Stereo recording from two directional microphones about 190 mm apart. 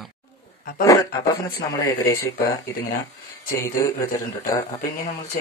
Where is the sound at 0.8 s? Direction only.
15° left (ahead or behind).